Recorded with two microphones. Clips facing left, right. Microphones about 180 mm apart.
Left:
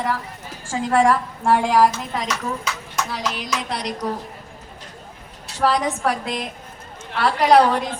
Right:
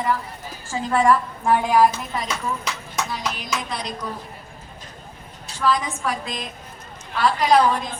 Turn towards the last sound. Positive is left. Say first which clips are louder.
# left 3 dB
turn(degrees=70)  # may be behind; listen again after turning